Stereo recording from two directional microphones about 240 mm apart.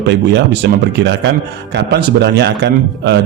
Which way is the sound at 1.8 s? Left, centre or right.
Right.